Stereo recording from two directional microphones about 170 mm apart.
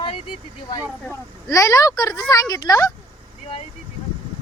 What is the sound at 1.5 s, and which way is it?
Speech, 20° left (ahead or behind).